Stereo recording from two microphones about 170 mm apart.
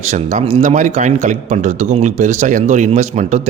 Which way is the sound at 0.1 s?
40° right (ahead or behind).